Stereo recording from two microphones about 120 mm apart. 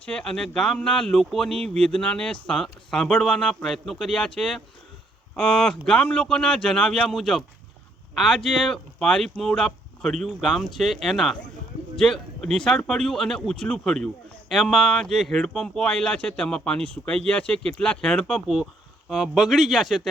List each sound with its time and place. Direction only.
0.0 s speech: 10° left (ahead or behind)